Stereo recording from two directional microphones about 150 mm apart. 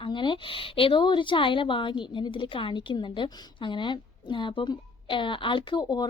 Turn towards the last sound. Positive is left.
turn(degrees=30)  # may be behind; listen again after turning